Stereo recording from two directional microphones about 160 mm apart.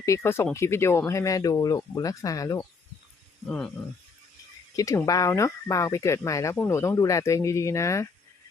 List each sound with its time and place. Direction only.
0.0 s speech: 15° left (ahead or behind)
3.4 s speech: 5° left (ahead or behind)
4.8 s speech: 20° left (ahead or behind)